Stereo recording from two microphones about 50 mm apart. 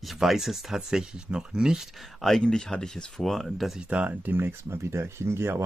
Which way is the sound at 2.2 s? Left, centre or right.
Centre.